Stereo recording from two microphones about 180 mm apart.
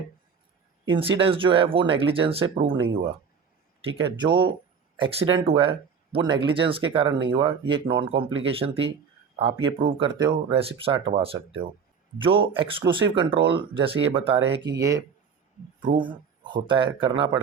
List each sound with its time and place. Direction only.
0.9 s speech: 30° right (ahead or behind)
3.8 s speech: 25° right (ahead or behind)